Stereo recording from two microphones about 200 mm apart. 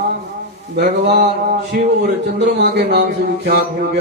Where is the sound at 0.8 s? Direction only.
55° right (ahead or behind).